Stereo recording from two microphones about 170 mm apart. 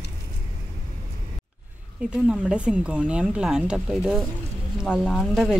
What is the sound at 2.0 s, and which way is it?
Speech, 5° right (ahead or behind).